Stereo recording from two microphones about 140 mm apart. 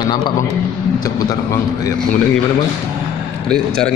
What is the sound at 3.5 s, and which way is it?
Speech, 5° left (ahead or behind).